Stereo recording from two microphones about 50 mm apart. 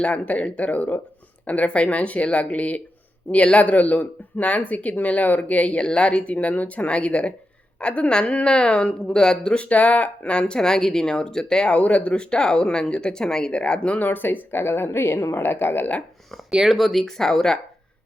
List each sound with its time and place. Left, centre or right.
0.0 s speech: left
14.0 s a woman's voice: left
15.4 s speech: left
16.5 s speech: centre
16.7 s speech: centre